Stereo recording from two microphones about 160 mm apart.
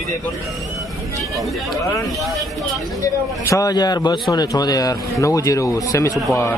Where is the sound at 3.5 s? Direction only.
20° left (ahead or behind).